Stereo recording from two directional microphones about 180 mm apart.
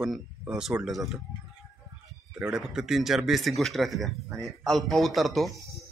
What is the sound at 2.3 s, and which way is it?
Speech, 5° right (ahead or behind).